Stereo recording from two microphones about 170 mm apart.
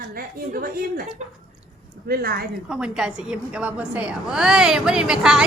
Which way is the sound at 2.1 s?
65° right (ahead or behind).